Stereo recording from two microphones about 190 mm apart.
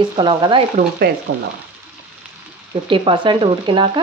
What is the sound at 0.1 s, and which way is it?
Speech, 25° right (ahead or behind).